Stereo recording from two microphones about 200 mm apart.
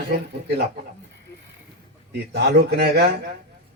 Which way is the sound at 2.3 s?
55° right (ahead or behind).